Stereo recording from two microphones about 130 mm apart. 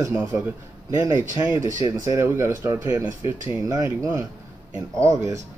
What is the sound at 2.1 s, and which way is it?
A man's voice, 20° right (ahead or behind).